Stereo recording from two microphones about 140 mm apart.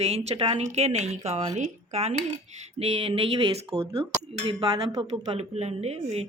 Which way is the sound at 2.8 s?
45° right (ahead or behind).